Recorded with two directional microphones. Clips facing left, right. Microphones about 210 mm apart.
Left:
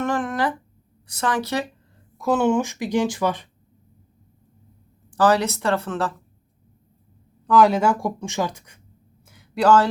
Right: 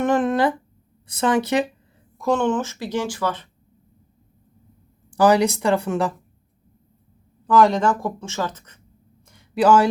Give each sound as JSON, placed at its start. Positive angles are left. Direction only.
{"t": 0.0, "sound": "a sound", "side_deg": -20}
{"t": 1.0, "sound": "a woman's voice", "side_deg": -20}
{"t": 2.1, "sound": "speech", "side_deg": 5}
{"t": 5.1, "sound": "speech", "side_deg": -15}
{"t": 7.4, "sound": "speech", "side_deg": 0}
{"t": 9.2, "sound": "a sound", "side_deg": 5}